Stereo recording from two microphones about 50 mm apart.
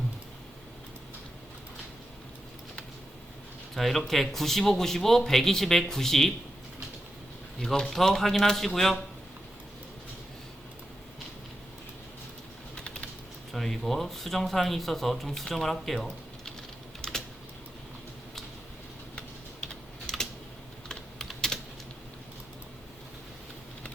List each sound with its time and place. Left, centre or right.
3.8 s speech: centre
7.6 s speech: centre
12.7 s typing: left
13.5 s speech: centre
17.0 s typing: centre
19.6 s typing: centre